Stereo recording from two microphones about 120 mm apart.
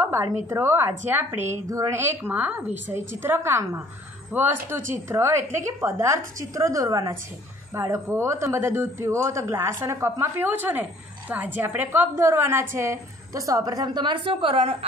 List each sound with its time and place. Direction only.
0.0 s speech: 20° right (ahead or behind); by 14.9 s 55° right (ahead or behind)